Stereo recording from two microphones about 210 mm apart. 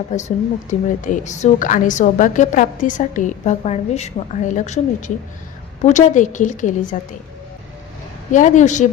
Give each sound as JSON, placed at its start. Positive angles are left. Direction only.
{"t": 0.1, "sound": "speech", "side_deg": 35}
{"t": 8.3, "sound": "speech", "side_deg": 35}